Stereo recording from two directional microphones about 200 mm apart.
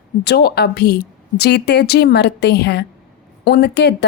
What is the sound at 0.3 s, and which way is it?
A woman's voice, 55° left (ahead or behind).